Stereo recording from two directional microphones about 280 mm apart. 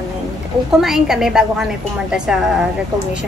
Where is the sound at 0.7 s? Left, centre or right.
Centre.